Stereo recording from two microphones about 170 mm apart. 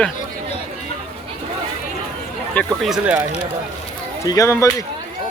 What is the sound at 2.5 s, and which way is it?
Speech, 5° left (ahead or behind).